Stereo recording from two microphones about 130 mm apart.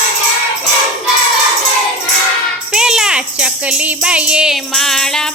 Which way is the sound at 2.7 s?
5° right (ahead or behind).